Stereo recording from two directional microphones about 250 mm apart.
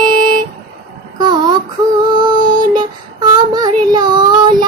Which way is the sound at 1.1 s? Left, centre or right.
Centre.